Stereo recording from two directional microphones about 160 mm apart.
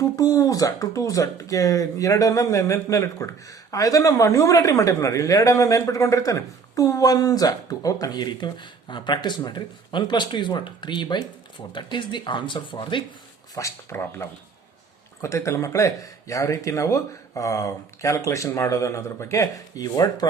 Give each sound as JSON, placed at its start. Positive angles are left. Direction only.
{"t": 0.0, "sound": "speech", "side_deg": 20}
{"t": 13.6, "sound": "speech", "side_deg": 15}